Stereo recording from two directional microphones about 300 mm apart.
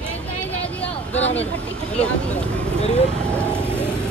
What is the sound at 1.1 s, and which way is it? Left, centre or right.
Speech, left.